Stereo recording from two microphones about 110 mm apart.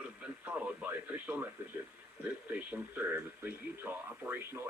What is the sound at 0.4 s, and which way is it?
Radio, 15° right (ahead or behind).